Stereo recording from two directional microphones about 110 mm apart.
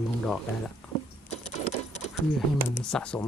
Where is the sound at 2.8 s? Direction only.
5° left (ahead or behind).